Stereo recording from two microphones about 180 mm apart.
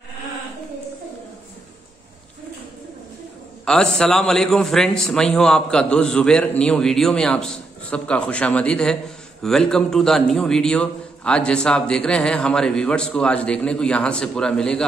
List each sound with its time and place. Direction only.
3.6 s a man's voice: 5° left (ahead or behind)